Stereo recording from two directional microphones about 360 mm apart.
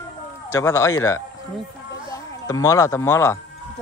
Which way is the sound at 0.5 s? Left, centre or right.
Centre.